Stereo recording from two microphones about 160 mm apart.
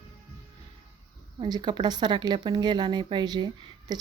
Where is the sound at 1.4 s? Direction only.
30° right (ahead or behind).